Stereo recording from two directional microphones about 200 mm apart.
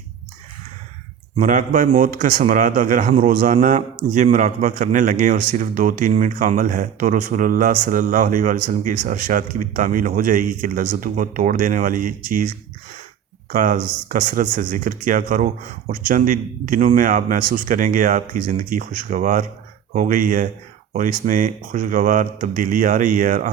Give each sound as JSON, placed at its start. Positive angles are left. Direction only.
{"t": 1.4, "sound": "a man's voice", "side_deg": -40}
{"t": 13.5, "sound": "a man's voice", "side_deg": -40}